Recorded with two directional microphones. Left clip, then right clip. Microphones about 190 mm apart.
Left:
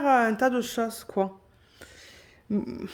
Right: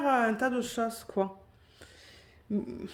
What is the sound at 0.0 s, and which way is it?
Speech, 30° left (ahead or behind).